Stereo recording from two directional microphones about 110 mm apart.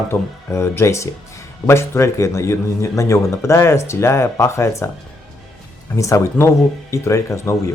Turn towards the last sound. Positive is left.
turn(degrees=25)  # may be behind; listen again after turning